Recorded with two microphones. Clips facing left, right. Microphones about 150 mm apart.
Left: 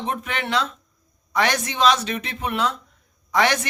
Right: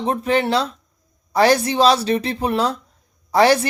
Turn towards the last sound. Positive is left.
turn(degrees=-30)  # may be behind; listen again after turning